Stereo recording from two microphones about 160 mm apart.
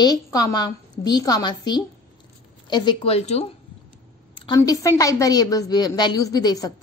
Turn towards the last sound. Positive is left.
turn(degrees=25)  # may be behind; listen again after turning